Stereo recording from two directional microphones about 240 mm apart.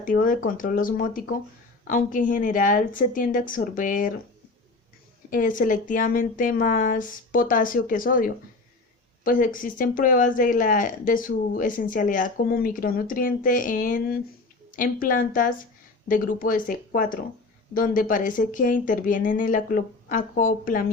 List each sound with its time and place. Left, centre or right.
0.0 s speech: left
5.3 s speech: left